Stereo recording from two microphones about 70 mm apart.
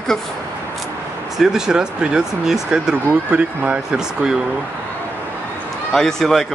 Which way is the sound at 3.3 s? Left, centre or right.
Centre.